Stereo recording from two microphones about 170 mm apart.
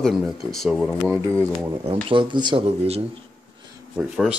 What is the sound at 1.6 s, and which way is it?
Speech, 35° right (ahead or behind).